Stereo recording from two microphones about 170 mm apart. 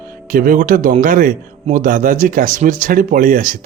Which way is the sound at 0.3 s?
55° right (ahead or behind).